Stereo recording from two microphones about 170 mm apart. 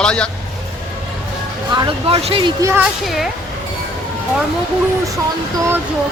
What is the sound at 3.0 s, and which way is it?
Speech, centre (ahead or behind).